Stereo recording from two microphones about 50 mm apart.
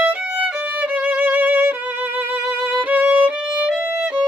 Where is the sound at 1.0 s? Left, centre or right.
Right.